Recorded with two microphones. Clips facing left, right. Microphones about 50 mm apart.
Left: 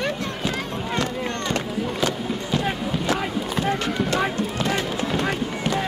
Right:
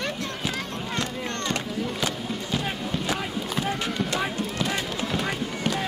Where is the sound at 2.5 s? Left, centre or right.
Centre.